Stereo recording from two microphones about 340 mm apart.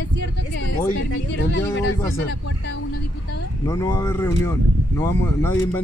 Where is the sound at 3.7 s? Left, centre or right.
Centre.